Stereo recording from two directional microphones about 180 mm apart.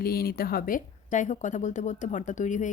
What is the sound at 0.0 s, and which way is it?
A woman's voice, 55° left (ahead or behind).